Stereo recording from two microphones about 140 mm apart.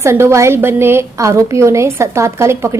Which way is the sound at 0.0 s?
20° right (ahead or behind).